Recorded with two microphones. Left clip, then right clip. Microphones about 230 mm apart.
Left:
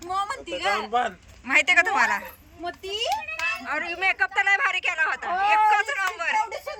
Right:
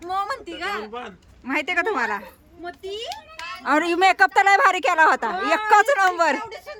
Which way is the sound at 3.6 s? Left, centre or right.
Right.